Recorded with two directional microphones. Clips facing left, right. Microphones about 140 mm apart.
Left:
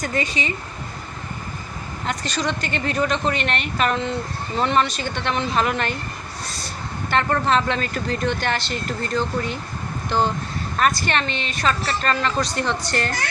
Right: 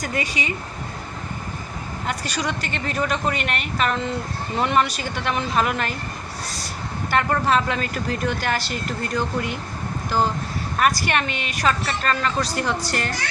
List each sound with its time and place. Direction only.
0.0 s speech: 10° right (ahead or behind)
2.0 s a woman's voice: 10° right (ahead or behind)
7.1 s speech: 10° right (ahead or behind)